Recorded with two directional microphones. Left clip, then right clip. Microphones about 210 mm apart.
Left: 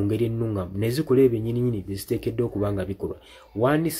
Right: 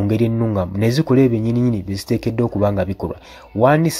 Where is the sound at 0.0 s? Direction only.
35° right (ahead or behind).